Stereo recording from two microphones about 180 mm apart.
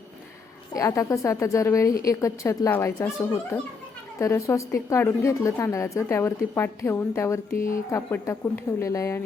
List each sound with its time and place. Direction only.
0.7 s a woman's voice: 20° left (ahead or behind)
7.5 s speech: 50° left (ahead or behind)
7.9 s a woman's voice: 15° left (ahead or behind)